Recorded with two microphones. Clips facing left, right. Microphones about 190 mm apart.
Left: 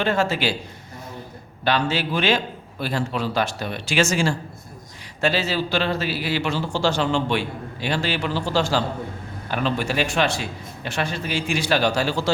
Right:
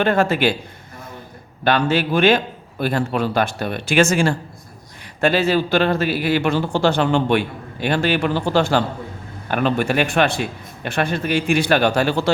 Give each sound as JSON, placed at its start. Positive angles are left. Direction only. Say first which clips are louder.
{"t": 0.0, "sound": "a man's voice", "louder": "right 5 dB", "side_deg": -55}
{"t": 1.6, "sound": "a man's voice", "louder": "right 4 dB", "side_deg": -55}